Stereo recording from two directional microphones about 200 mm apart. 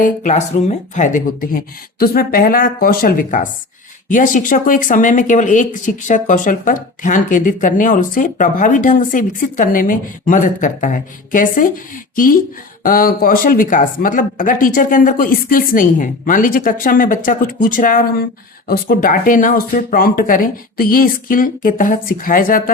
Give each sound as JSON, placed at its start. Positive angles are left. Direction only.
{"t": 0.0, "sound": "speech", "side_deg": 35}